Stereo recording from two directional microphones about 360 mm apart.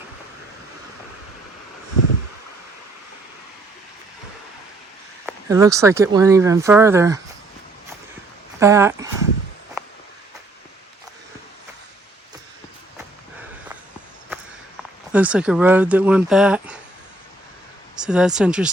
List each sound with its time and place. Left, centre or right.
5.2 s speech: centre
8.5 s speech: centre
15.1 s speech: centre
17.9 s speech: centre